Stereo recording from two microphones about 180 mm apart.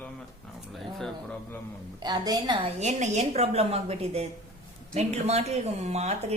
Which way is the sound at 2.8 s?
40° right (ahead or behind).